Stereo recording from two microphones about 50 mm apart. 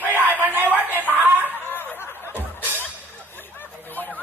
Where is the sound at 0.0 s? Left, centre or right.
Right.